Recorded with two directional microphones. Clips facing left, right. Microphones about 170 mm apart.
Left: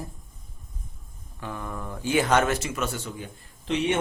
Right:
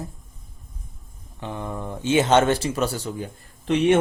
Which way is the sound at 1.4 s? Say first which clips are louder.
Right 4 dB; 25° right (ahead or behind).